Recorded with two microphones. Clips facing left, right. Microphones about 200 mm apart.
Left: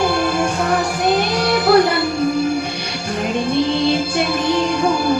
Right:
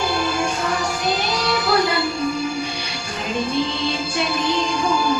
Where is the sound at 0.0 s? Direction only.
55° left (ahead or behind).